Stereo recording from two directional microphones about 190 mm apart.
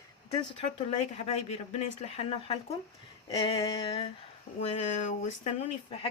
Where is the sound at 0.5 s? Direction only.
30° left (ahead or behind).